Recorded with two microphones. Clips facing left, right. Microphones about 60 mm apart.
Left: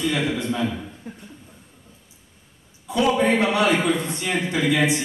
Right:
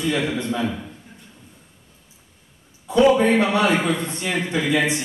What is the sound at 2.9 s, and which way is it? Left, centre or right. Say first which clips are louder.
A man's voice: right 4 dB; right.